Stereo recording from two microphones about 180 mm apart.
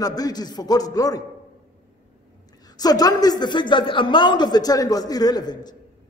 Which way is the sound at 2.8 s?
20° left (ahead or behind).